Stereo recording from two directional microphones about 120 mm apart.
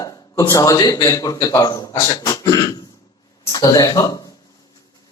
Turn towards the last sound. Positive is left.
turn(degrees=30)  # may be behind; listen again after turning